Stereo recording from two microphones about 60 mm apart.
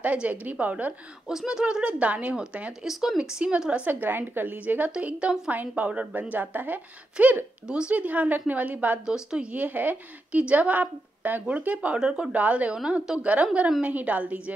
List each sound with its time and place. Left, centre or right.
0.0 s a woman's voice: right
1.2 s speech: centre
3.8 s a woman's voice: right; by 5.5 s centre
5.5 s a woman's voice: right
9.0 s speech: centre
9.5 s a woman's voice: right
12.7 s speech: centre
13.2 s a woman's voice: right